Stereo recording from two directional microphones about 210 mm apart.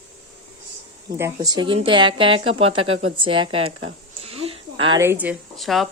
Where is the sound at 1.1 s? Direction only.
15° right (ahead or behind).